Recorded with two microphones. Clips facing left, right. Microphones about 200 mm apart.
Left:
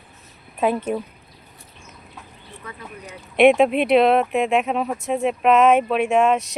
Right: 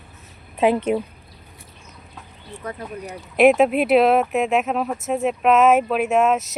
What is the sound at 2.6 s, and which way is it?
Speech, 40° right (ahead or behind).